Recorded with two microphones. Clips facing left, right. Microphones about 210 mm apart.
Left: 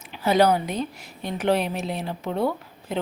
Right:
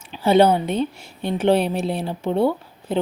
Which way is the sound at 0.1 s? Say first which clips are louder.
Right 4 dB; 25° right (ahead or behind).